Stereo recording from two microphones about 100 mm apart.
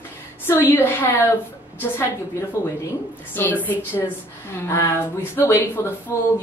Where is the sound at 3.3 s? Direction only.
20° left (ahead or behind).